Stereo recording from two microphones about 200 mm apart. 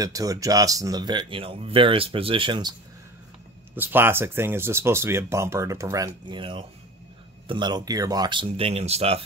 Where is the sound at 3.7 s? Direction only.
10° right (ahead or behind); by 9.2 s 30° right (ahead or behind).